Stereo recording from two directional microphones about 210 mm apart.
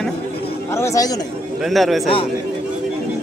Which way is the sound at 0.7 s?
15° left (ahead or behind).